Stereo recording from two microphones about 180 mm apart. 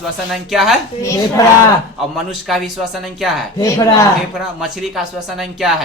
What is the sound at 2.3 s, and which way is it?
Speech, centre (ahead or behind).